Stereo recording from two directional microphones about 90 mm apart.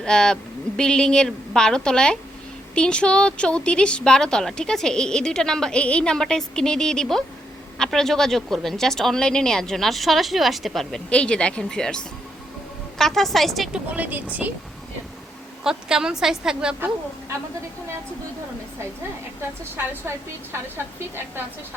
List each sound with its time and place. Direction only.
0.0 s a woman's voice: 5° left (ahead or behind)
11.1 s a woman's voice: 10° left (ahead or behind)
13.7 s speech: 20° right (ahead or behind)
15.6 s speech: 5° right (ahead or behind)
19.7 s a woman's voice: 25° right (ahead or behind)